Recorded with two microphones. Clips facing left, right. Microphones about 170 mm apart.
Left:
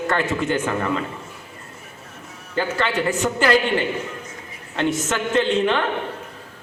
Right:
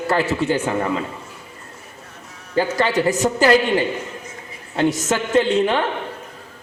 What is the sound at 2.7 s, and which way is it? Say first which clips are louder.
A man's voice: right 3 dB; 35° right (ahead or behind).